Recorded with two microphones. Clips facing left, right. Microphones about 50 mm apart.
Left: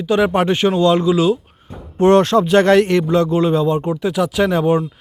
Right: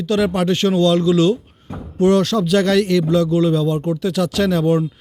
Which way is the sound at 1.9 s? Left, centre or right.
Left.